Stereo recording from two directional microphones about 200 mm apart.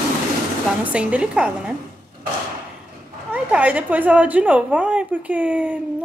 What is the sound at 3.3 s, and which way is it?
A woman's voice, 5° right (ahead or behind).